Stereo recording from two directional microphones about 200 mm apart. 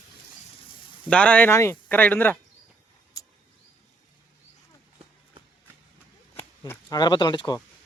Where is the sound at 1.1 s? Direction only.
5° left (ahead or behind).